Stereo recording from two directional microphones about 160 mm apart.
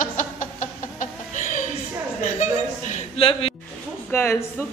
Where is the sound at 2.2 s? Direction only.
50° left (ahead or behind).